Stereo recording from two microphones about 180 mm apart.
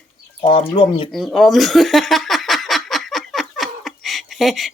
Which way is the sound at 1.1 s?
Centre (ahead or behind).